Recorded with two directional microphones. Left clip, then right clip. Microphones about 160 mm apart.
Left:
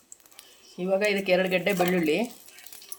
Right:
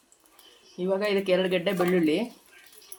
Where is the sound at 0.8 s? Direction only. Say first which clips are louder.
Left 1 dB; 15° left (ahead or behind).